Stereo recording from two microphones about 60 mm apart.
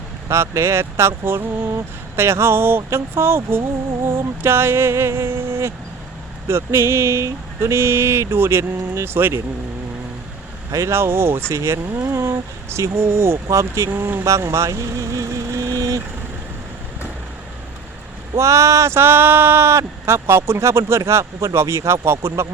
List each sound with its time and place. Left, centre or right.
0.3 s speech: right
10.7 s speech: right
13.9 s speech: right
14.3 s vehicle: right
18.3 s speech: right